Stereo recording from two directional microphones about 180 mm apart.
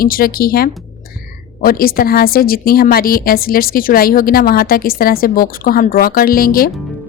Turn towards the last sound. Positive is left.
turn(degrees=55)  # may be behind; listen again after turning